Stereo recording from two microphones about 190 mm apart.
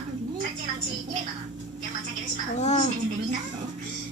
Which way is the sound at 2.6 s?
35° left (ahead or behind).